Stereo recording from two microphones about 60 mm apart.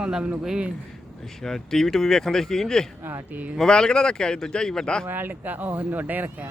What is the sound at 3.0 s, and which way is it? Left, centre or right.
Speech, right.